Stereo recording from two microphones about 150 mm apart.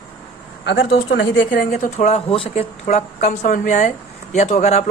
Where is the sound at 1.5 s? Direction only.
65° left (ahead or behind).